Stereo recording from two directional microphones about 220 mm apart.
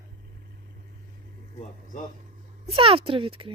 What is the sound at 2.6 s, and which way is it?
Speech, 25° right (ahead or behind).